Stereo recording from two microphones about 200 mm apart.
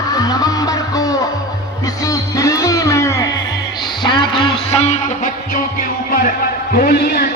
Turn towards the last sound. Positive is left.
turn(degrees=50)  # may be behind; listen again after turning